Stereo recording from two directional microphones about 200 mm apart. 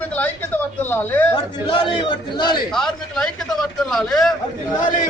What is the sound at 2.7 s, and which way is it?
A man's voice, centre (ahead or behind).